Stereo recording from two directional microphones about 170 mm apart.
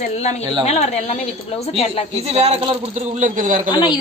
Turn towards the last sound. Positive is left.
turn(degrees=25)  # may be behind; listen again after turning